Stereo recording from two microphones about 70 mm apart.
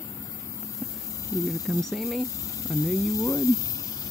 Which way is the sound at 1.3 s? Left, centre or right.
Left.